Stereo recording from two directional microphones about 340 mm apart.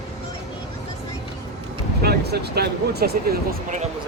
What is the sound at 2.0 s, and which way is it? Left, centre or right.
Speech, right.